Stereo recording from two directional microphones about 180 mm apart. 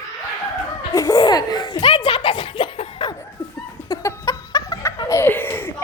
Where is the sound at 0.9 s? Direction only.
20° left (ahead or behind).